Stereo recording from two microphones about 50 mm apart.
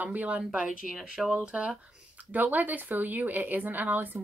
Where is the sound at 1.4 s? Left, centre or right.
Right.